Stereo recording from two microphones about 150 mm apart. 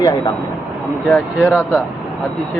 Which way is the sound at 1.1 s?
10° left (ahead or behind).